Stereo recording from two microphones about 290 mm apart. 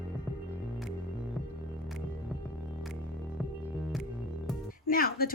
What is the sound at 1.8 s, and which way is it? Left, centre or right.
Music, centre.